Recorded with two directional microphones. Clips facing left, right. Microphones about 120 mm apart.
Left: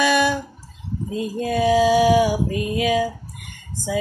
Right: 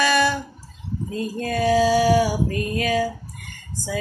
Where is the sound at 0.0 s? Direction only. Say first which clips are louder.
Left 1 dB; 15° left (ahead or behind).